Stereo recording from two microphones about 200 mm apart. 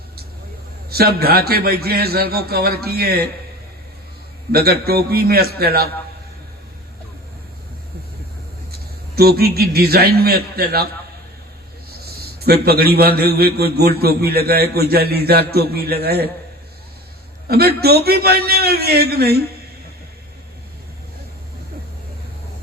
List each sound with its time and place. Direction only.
0.9 s a man's voice: 50° right (ahead or behind)
4.5 s a man's voice: 50° right (ahead or behind)
9.1 s a man's voice: 50° right (ahead or behind)
12.0 s a man's voice: 50° right (ahead or behind)
17.5 s a man's voice: 50° right (ahead or behind)